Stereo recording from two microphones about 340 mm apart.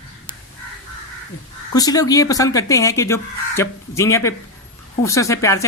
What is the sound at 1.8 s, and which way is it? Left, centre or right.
Speech, centre.